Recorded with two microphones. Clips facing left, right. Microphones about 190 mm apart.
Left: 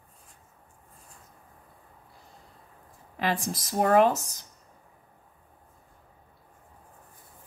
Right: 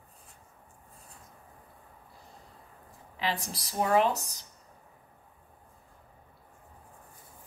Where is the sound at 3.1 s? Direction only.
50° left (ahead or behind).